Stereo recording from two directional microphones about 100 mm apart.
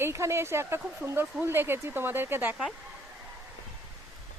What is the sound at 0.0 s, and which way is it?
Speech, 30° right (ahead or behind).